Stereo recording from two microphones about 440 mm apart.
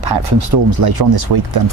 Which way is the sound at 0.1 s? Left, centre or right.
Right.